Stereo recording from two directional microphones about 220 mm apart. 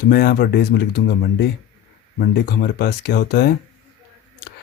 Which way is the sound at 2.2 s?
45° left (ahead or behind).